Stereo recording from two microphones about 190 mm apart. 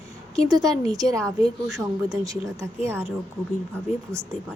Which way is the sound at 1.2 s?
Centre (ahead or behind).